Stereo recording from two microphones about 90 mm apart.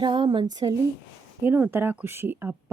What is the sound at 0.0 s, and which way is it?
Speech, 60° right (ahead or behind).